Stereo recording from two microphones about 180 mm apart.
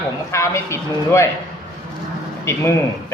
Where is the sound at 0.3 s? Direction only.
15° left (ahead or behind).